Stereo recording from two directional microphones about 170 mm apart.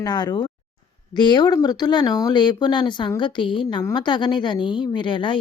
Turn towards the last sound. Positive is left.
turn(degrees=30)  # may be behind; listen again after turning